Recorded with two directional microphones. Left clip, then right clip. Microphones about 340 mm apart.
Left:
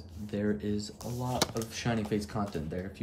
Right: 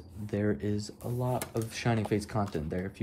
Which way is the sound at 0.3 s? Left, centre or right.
Centre.